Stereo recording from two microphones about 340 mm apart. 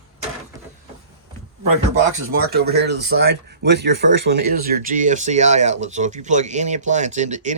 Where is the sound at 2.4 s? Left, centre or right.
Right.